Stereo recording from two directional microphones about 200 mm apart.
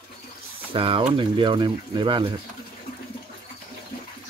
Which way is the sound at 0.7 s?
25° right (ahead or behind).